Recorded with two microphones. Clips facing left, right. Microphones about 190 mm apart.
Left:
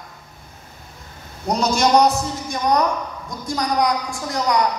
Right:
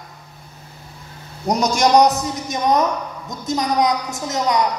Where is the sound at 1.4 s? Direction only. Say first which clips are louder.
Right 1 dB; 15° right (ahead or behind).